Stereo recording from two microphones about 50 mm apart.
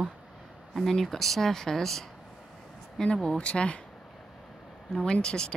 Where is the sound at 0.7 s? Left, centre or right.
Centre; by 3.8 s left.